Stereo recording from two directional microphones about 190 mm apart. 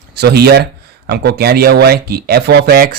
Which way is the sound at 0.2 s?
55° right (ahead or behind).